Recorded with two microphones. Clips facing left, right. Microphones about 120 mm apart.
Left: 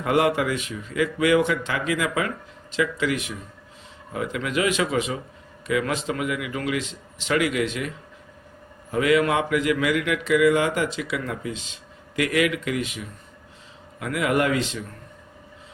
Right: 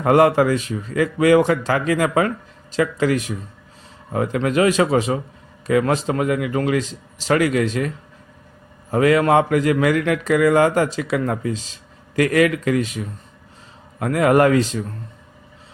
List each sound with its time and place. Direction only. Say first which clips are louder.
0.0 s speech: right 7 dB; 40° right (ahead or behind)